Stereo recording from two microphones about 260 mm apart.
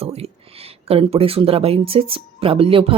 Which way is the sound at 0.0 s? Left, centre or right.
Right.